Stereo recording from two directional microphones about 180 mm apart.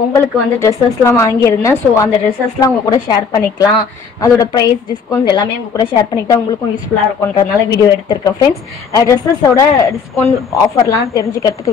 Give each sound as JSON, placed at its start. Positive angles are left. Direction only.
{"t": 0.1, "sound": "a woman's voice", "side_deg": 15}